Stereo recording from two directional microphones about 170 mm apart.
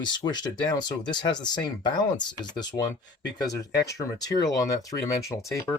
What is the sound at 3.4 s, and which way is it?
Speech, 20° left (ahead or behind).